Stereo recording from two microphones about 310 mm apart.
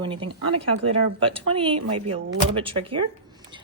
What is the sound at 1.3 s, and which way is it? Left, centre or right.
Speech, centre.